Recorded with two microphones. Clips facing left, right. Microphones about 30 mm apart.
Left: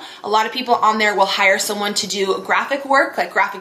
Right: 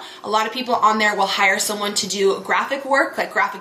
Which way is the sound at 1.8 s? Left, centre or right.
Centre.